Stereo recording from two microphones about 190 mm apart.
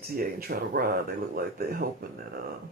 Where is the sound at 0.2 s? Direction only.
55° right (ahead or behind).